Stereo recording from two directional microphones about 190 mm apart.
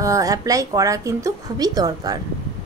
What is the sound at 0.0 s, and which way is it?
A woman's voice, 15° right (ahead or behind).